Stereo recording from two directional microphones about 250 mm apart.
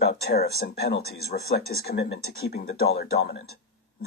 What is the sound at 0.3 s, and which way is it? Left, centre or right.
Speech, left.